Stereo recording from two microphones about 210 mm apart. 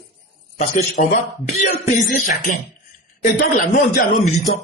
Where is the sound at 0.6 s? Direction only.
30° left (ahead or behind).